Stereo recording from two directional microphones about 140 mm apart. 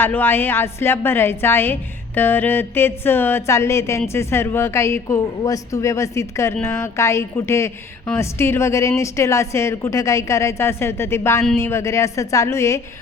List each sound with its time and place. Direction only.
0.0 s a woman's voice: 15° left (ahead or behind)